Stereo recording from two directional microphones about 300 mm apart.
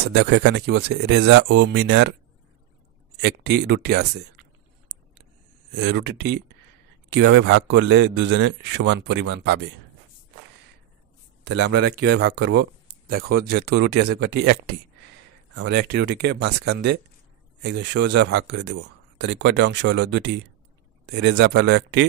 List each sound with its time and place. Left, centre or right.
0.1 s speech: right
3.6 s speech: right
5.8 s speech: right
11.4 s speech: right
15.5 s speech: right